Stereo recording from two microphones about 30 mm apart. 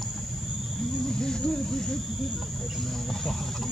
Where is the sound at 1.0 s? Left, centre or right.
Left.